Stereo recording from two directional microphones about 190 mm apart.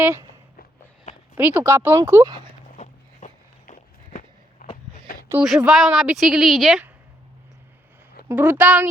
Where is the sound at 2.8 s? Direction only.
40° left (ahead or behind).